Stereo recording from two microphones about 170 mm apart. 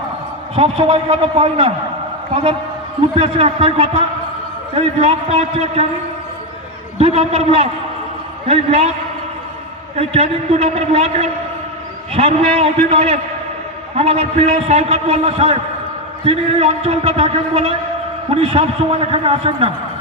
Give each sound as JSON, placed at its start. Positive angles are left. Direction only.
{"t": 0.5, "sound": "a man's voice", "side_deg": -35}
{"t": 7.0, "sound": "a man's voice", "side_deg": -35}
{"t": 9.9, "sound": "a man's voice", "side_deg": -35}